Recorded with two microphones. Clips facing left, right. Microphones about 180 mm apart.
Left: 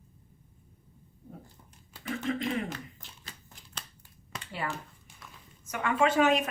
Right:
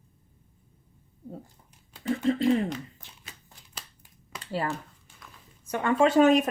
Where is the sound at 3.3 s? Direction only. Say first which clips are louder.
Left 1 dB; 5° right (ahead or behind).